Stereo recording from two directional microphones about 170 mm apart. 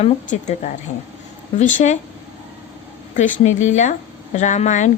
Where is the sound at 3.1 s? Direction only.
45° left (ahead or behind).